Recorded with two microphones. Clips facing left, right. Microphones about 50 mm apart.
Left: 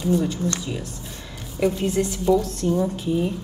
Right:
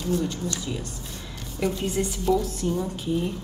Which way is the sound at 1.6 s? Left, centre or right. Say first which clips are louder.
Left 4 dB; centre.